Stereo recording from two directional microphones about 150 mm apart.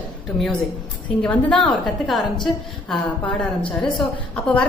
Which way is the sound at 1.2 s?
5° left (ahead or behind).